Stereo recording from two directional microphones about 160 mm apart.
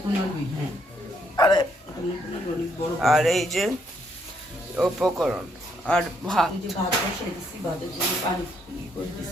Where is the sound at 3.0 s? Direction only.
Centre (ahead or behind).